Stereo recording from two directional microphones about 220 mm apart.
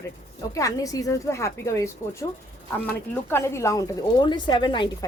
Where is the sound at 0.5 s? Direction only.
15° left (ahead or behind).